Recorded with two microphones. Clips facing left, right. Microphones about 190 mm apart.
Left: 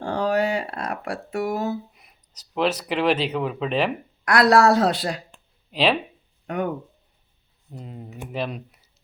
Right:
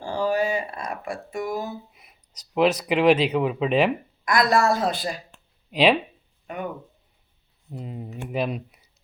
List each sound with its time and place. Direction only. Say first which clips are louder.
0.0 s a sound: left 1 dB; 65° left (ahead or behind)
2.0 s speech: right 1 dB; 5° right (ahead or behind)
4.3 s a woman's voice: left 4 dB; 70° left (ahead or behind)
5.7 s speech: right 2 dB; 10° right (ahead or behind)
7.7 s speech: right 3 dB; 5° right (ahead or behind)